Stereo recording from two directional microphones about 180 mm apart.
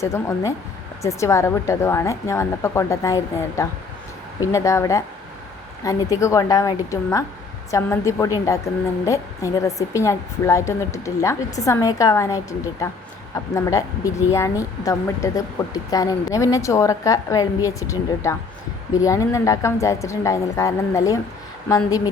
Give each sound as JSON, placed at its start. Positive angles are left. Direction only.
{"t": 0.0, "sound": "a woman's voice", "side_deg": 15}